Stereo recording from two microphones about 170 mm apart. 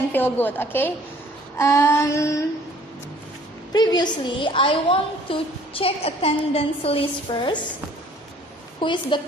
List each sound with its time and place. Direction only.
0.1 s child singing: 10° left (ahead or behind)
3.7 s a woman's voice: 25° left (ahead or behind)
8.8 s a woman's voice: 30° left (ahead or behind)